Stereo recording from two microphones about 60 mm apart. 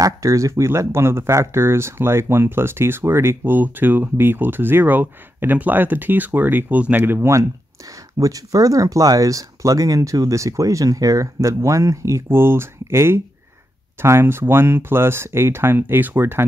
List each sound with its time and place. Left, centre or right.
0.0 s speech: right
8.2 s speech: right
12.3 s speech: right